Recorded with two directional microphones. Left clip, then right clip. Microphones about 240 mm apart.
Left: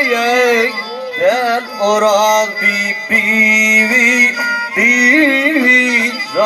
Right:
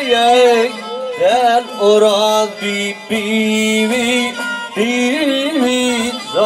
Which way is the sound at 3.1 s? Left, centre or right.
Right.